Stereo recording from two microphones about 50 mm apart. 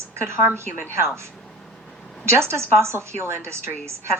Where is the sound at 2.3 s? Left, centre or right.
Right.